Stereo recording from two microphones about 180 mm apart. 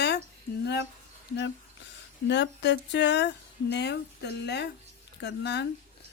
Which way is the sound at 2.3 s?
75° left (ahead or behind).